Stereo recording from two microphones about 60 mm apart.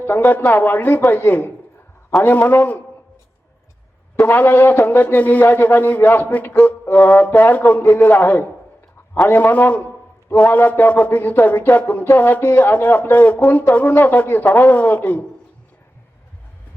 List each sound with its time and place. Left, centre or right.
0.0 s a man's voice: left
4.3 s a man's voice: left